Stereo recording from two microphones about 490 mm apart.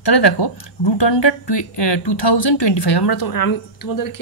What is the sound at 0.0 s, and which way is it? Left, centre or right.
Speech, left.